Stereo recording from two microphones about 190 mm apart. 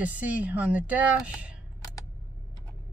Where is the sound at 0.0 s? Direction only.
10° right (ahead or behind).